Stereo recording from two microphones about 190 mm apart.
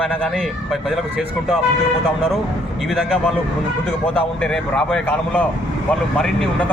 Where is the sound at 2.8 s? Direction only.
Centre (ahead or behind).